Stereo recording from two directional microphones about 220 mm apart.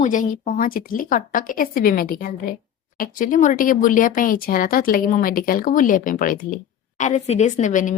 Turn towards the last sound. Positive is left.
turn(degrees=35)  # may be behind; listen again after turning